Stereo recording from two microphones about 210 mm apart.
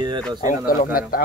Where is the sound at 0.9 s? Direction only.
45° left (ahead or behind).